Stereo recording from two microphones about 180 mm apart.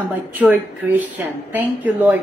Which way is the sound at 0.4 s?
10° right (ahead or behind).